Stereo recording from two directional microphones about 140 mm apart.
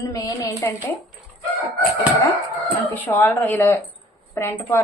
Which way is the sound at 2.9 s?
15° left (ahead or behind).